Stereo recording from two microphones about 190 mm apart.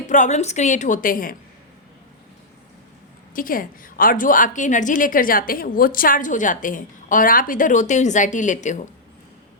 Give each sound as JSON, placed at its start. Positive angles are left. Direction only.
{"t": 0.1, "sound": "a woman's voice", "side_deg": 40}
{"t": 3.3, "sound": "a woman's voice", "side_deg": 45}